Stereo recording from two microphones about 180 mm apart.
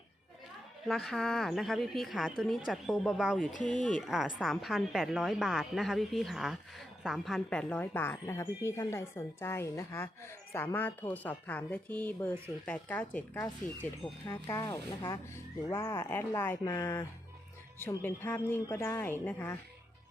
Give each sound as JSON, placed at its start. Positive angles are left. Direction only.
{"t": 0.9, "sound": "a woman's voice", "side_deg": 0}
{"t": 3.5, "sound": "speech", "side_deg": 45}
{"t": 4.0, "sound": "a woman's voice", "side_deg": 0}
{"t": 14.3, "sound": "a woman's voice", "side_deg": 20}
{"t": 16.6, "sound": "speech", "side_deg": 25}
{"t": 17.7, "sound": "a woman's voice", "side_deg": 10}